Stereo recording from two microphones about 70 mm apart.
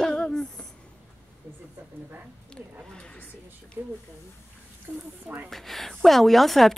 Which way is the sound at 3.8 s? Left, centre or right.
Right.